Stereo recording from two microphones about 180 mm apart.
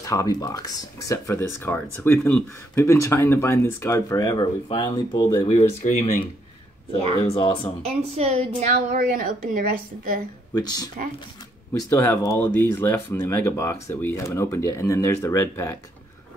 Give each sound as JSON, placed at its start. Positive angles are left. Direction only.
{"t": 0.0, "sound": "speech", "side_deg": 20}
{"t": 7.2, "sound": "speech", "side_deg": 30}
{"t": 7.8, "sound": "a woman's voice", "side_deg": -35}
{"t": 10.5, "sound": "speech", "side_deg": 20}